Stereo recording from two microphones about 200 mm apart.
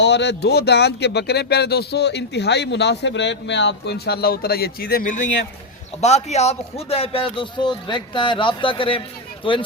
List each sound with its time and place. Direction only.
0.0 s speech: 60° left (ahead or behind); by 9.6 s 25° left (ahead or behind)